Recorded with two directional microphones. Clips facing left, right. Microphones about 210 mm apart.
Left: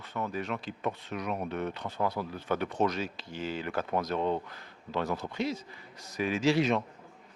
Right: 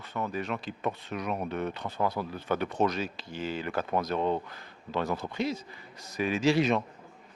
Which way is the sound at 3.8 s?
25° right (ahead or behind).